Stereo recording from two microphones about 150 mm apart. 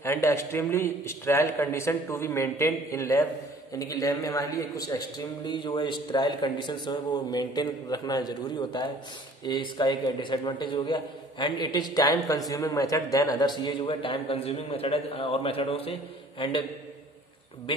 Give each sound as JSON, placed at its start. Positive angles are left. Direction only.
{"t": 0.0, "sound": "a man's voice", "side_deg": 15}
{"t": 17.7, "sound": "a man's voice", "side_deg": 35}